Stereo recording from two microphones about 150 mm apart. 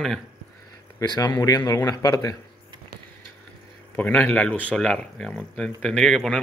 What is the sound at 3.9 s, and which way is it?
Speech, 10° left (ahead or behind).